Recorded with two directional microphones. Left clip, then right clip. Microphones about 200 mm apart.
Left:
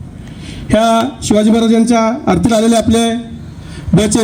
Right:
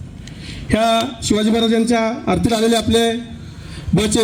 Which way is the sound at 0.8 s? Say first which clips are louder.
Left 4 dB; 65° left (ahead or behind).